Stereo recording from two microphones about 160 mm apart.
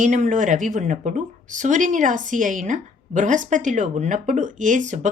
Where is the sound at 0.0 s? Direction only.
50° right (ahead or behind).